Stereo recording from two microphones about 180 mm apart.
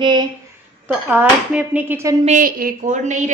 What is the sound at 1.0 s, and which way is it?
Dishes, 10° right (ahead or behind).